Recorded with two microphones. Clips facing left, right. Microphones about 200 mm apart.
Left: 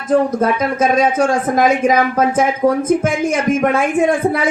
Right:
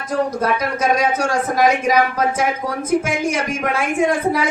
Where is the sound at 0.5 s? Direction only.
50° left (ahead or behind).